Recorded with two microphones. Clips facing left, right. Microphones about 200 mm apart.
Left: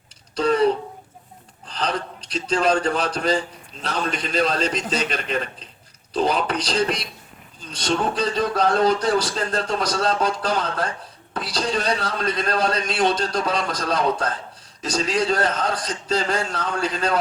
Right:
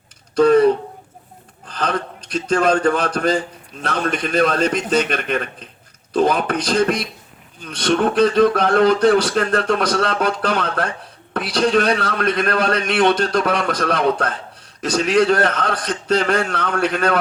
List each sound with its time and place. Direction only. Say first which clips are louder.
0.3 s a man's voice: right 6 dB; 50° right (ahead or behind)